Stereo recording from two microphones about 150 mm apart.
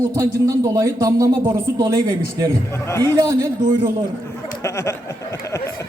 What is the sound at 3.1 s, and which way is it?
Speech, 30° right (ahead or behind).